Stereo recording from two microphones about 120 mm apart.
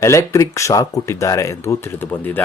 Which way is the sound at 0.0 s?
25° left (ahead or behind).